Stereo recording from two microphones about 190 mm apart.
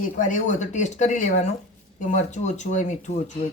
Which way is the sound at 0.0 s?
40° left (ahead or behind).